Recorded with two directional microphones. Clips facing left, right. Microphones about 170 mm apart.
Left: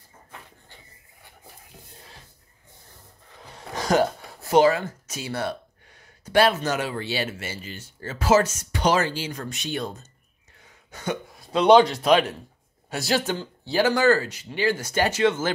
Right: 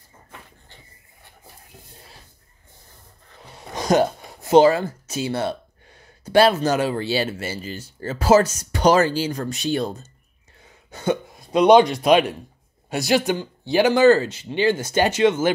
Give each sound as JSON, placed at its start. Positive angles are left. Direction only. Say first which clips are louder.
{"t": 3.5, "sound": "speech", "louder": "right 3 dB", "side_deg": -15}
{"t": 10.9, "sound": "cough", "louder": "right 7 dB", "side_deg": -30}
{"t": 11.5, "sound": "speech", "louder": "right 2 dB", "side_deg": -15}